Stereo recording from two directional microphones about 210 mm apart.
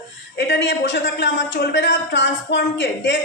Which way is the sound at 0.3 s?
55° left (ahead or behind).